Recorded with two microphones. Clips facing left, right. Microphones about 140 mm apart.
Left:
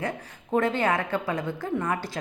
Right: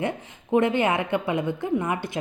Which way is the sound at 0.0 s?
20° right (ahead or behind).